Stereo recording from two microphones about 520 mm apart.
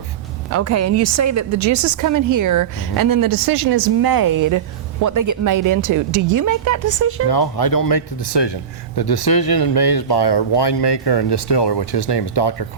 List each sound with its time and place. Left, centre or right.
0.5 s a woman's voice: right
7.3 s speech: left